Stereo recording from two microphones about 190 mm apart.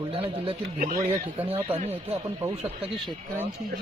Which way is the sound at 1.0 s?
15° right (ahead or behind).